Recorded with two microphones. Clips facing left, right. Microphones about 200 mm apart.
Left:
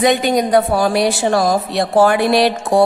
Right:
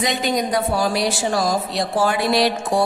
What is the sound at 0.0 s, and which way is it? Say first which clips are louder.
A woman's voice: left 7 dB; 55° left (ahead or behind).